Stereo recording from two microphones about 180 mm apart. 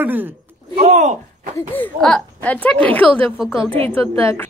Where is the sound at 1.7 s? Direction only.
5° left (ahead or behind).